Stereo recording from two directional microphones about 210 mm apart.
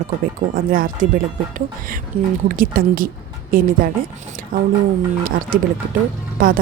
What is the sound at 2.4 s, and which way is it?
Speech, 40° right (ahead or behind).